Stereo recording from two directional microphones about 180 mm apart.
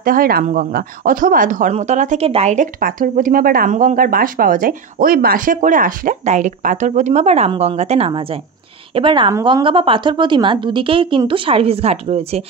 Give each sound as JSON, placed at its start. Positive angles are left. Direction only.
{"t": 0.0, "sound": "a woman's voice", "side_deg": -55}